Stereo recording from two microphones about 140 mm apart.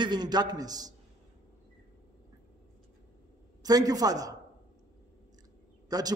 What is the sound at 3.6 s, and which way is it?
Speech, 25° right (ahead or behind).